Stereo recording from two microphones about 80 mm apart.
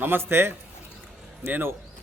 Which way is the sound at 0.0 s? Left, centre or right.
Right.